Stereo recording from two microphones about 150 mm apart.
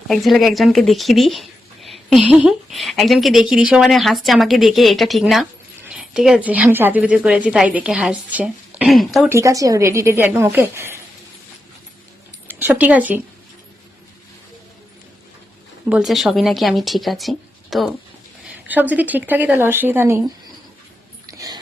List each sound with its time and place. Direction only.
0.1 s a woman's voice: centre (ahead or behind)
9.3 s a woman's voice: 20° right (ahead or behind)
12.5 s speech: 15° right (ahead or behind)
15.9 s a woman's voice: 5° right (ahead or behind)
18.4 s a woman's voice: 10° right (ahead or behind)
21.2 s a sound: 25° right (ahead or behind)